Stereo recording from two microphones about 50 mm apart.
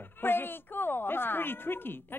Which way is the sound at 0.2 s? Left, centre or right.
Left.